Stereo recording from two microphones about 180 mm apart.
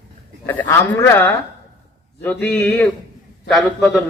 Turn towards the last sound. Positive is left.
turn(degrees=5)  # may be behind; listen again after turning